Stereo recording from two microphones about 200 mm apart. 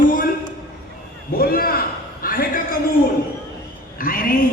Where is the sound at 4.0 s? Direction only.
45° left (ahead or behind).